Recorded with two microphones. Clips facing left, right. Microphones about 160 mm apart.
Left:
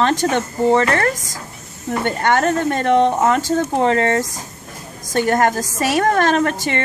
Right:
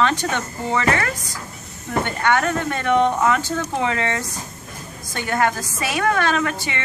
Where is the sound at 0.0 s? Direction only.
40° left (ahead or behind).